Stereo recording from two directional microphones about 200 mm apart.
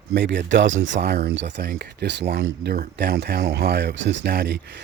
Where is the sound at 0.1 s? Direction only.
60° right (ahead or behind).